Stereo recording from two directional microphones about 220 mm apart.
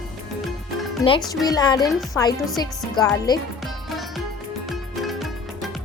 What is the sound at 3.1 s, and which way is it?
Speech, 20° left (ahead or behind).